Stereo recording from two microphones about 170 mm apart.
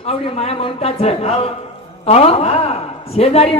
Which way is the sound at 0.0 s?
35° left (ahead or behind).